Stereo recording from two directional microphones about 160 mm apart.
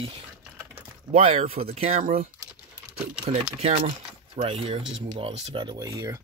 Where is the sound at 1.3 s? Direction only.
40° right (ahead or behind).